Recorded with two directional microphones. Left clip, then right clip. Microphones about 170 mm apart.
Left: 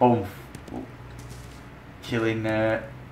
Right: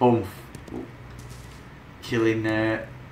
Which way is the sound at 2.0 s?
5° right (ahead or behind).